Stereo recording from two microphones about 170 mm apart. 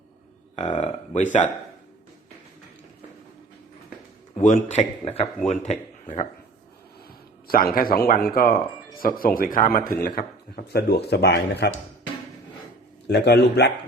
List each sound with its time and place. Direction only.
0.5 s speech: 45° left (ahead or behind)
4.4 s a man's voice: 45° left (ahead or behind)
7.4 s speech: 60° left (ahead or behind); by 11.7 s 75° left (ahead or behind)
13.1 s speech: 80° left